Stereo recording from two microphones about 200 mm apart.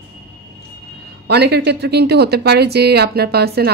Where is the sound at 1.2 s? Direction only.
55° right (ahead or behind).